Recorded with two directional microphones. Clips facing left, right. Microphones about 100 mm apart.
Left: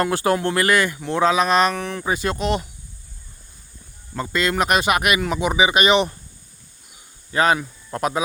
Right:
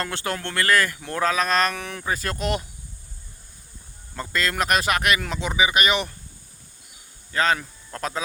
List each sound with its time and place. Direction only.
0.0 s a man's voice: 20° left (ahead or behind)
1.7 s speech: centre (ahead or behind)
4.1 s a man's voice: 5° left (ahead or behind); by 6.1 s 20° left (ahead or behind)
7.3 s a man's voice: 20° left (ahead or behind)